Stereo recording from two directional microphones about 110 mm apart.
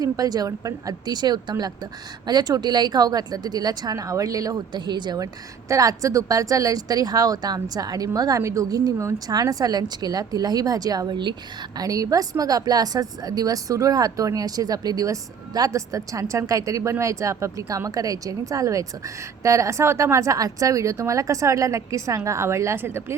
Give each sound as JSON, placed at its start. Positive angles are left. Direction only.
{"t": 0.0, "sound": "speech", "side_deg": -35}
{"t": 11.8, "sound": "speech", "side_deg": -30}